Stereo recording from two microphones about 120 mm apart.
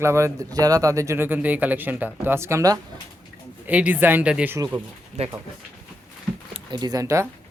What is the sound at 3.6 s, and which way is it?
Speech, 15° right (ahead or behind).